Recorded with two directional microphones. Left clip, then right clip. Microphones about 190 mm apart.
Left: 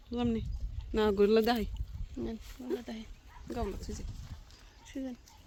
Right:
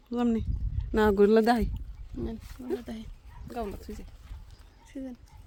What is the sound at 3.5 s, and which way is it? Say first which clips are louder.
Speech: right 2 dB; 55° right (ahead or behind).